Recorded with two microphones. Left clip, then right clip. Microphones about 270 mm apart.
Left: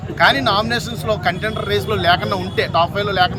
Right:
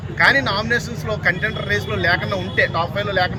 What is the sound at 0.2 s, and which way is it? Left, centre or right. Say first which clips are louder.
Speech: left 2 dB; centre.